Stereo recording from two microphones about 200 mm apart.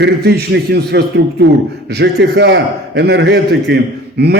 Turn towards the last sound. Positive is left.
turn(degrees=-55)  # may be behind; listen again after turning